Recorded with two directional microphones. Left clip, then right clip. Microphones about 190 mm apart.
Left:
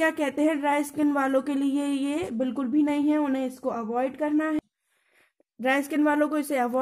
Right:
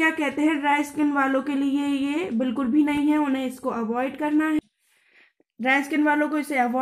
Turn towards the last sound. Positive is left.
turn(degrees=50)  # may be behind; listen again after turning